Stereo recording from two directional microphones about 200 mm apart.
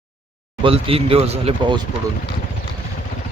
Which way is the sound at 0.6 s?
30° right (ahead or behind).